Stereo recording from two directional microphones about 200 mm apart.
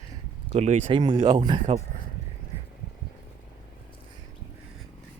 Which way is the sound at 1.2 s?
20° right (ahead or behind).